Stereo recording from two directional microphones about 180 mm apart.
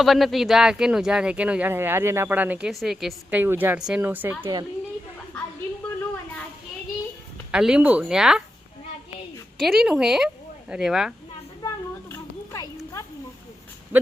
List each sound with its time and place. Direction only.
0.0 s speech: centre (ahead or behind); by 4.6 s 15° right (ahead or behind)
7.5 s speech: 5° right (ahead or behind)
9.6 s speech: centre (ahead or behind)
11.6 s a sound: 15° left (ahead or behind)